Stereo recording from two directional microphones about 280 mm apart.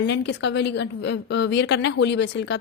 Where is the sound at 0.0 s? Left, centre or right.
Left.